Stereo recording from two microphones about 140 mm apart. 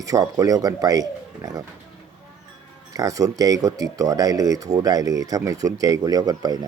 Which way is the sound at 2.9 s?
25° right (ahead or behind).